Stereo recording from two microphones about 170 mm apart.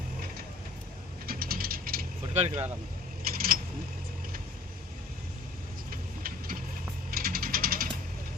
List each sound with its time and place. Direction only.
1.3 s mechanisms: 60° right (ahead or behind)
2.4 s speech: 40° right (ahead or behind)
3.3 s vehicle: 60° right (ahead or behind)
5.9 s vehicle: 55° right (ahead or behind)
7.1 s a sound: 60° right (ahead or behind)